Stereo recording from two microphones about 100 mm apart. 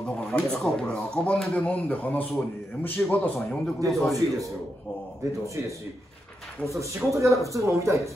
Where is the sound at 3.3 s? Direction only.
5° left (ahead or behind).